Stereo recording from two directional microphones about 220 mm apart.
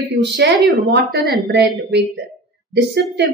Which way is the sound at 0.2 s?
50° right (ahead or behind).